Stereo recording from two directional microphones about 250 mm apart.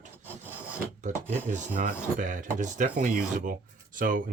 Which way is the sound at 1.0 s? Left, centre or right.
Right.